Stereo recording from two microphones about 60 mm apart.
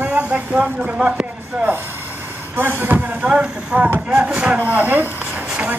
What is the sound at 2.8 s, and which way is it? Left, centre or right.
Speech, right.